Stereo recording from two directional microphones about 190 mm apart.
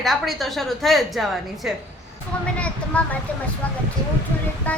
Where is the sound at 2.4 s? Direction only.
5° left (ahead or behind).